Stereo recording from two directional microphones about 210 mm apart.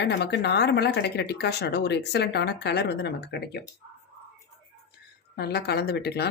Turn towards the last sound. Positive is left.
turn(degrees=50)  # may be behind; listen again after turning